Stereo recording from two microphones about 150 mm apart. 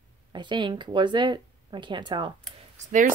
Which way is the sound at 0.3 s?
30° right (ahead or behind).